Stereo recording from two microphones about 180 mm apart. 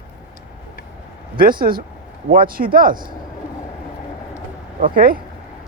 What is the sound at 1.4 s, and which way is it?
Speech, 55° right (ahead or behind).